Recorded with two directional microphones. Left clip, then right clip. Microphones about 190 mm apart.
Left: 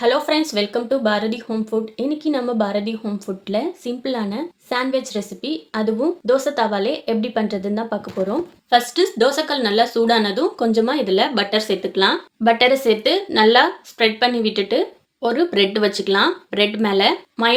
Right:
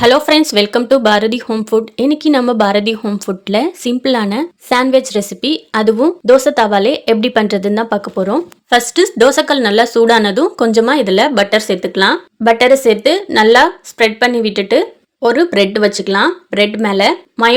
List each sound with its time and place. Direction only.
0.0 s speech: 55° right (ahead or behind); by 17.5 s 35° right (ahead or behind)